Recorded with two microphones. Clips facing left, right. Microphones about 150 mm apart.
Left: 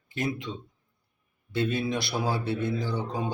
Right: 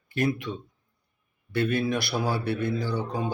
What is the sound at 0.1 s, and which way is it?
A man's voice, 20° left (ahead or behind).